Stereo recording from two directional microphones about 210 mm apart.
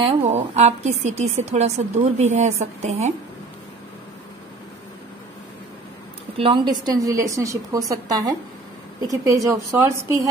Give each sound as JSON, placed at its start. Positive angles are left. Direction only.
{"t": 0.0, "sound": "a woman's voice", "side_deg": -30}
{"t": 6.3, "sound": "a woman's voice", "side_deg": -25}